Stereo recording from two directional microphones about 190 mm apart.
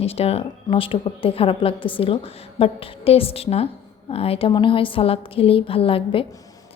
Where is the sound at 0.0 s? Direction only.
30° left (ahead or behind).